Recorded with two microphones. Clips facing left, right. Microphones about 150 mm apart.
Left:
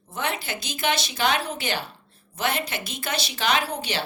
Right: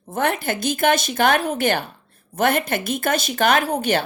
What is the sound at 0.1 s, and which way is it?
A woman's voice, 50° right (ahead or behind).